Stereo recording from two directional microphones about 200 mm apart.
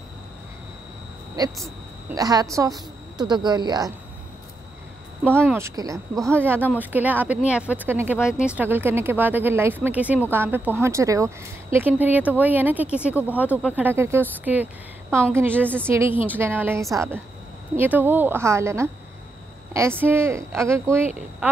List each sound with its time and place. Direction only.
2.0 s a woman's voice: 20° right (ahead or behind)
5.5 s speech: 15° right (ahead or behind)